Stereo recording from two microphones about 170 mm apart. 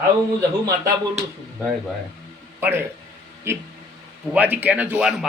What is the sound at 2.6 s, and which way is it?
A man's voice, 10° right (ahead or behind).